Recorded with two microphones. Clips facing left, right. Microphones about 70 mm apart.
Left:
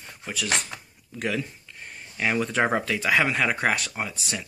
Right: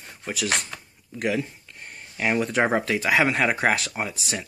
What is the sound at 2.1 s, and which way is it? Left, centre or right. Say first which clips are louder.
Speech: right 1 dB; right.